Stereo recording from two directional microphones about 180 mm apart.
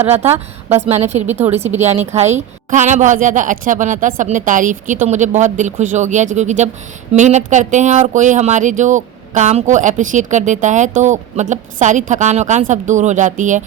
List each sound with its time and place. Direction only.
0.1 s a woman's voice: 35° right (ahead or behind)